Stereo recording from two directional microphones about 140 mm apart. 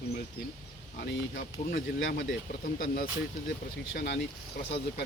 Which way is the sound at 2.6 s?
85° left.